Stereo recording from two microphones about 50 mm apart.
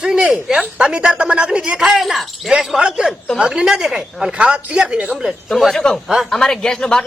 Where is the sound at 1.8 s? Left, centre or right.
Centre.